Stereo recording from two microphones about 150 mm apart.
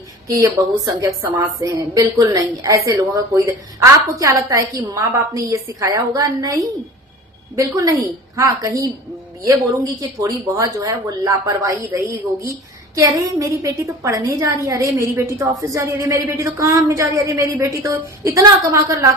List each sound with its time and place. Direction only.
0.3 s a woman's voice: 20° right (ahead or behind)
10.0 s a woman's voice: 25° right (ahead or behind)
13.0 s a woman's voice: 20° right (ahead or behind)